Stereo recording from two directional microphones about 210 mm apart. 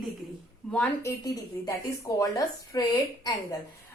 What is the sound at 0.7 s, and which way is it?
Speech, 10° left (ahead or behind).